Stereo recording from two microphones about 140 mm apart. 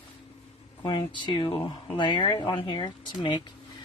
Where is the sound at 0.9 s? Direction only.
35° left (ahead or behind).